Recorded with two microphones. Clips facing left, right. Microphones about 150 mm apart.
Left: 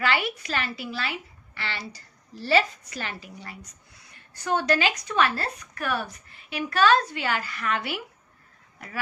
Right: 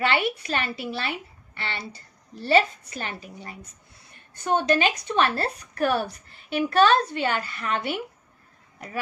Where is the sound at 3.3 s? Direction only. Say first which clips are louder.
Right 1 dB; 25° right (ahead or behind).